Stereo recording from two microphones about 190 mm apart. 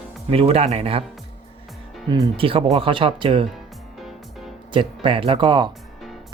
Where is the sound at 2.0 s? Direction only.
20° right (ahead or behind).